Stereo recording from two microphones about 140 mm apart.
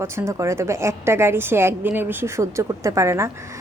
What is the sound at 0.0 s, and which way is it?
A woman's voice, 20° right (ahead or behind).